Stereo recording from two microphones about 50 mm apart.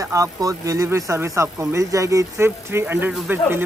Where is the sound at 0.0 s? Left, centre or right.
Right.